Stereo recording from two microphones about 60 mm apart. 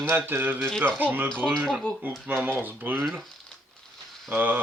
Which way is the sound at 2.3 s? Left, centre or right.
Right.